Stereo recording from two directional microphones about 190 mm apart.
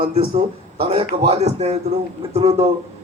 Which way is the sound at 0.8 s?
30° right (ahead or behind).